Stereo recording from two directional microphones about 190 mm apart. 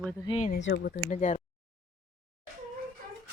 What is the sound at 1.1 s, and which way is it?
Speech, 40° left (ahead or behind).